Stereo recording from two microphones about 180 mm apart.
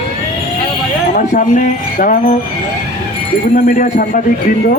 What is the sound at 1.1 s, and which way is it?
Speech, 45° left (ahead or behind).